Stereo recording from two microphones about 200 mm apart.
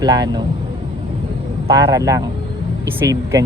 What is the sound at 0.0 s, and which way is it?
Speech, 20° right (ahead or behind).